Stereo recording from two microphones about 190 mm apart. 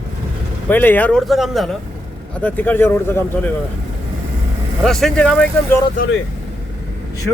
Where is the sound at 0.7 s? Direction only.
10° left (ahead or behind).